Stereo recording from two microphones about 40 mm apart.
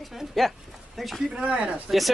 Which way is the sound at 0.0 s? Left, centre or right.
Centre.